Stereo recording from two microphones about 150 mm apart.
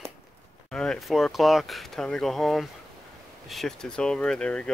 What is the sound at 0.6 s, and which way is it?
Speech, 5° left (ahead or behind).